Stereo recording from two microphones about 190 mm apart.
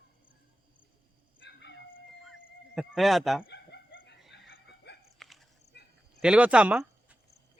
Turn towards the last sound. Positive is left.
turn(degrees=-5)  # may be behind; listen again after turning